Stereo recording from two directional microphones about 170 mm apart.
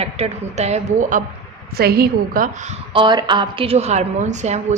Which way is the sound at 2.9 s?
30° right (ahead or behind).